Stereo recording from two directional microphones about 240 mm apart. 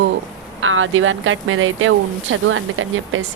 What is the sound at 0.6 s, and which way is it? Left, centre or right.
Speech, right.